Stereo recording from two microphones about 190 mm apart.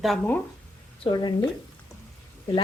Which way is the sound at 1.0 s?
20° left (ahead or behind).